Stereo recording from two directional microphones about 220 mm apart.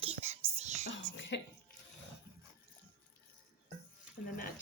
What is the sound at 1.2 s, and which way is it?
Cough, 55° left (ahead or behind).